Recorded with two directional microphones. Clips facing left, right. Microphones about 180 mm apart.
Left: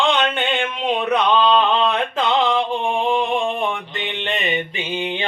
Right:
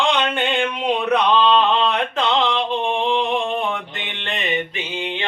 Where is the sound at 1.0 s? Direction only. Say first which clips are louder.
Even; 5° left (ahead or behind).